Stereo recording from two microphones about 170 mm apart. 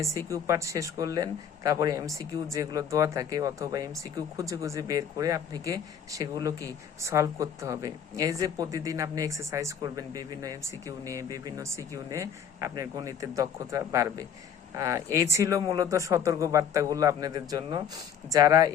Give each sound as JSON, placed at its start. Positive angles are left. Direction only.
{"t": 0.3, "sound": "speech", "side_deg": -20}